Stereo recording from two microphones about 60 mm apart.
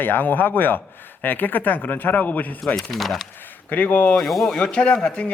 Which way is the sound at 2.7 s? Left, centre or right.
Centre.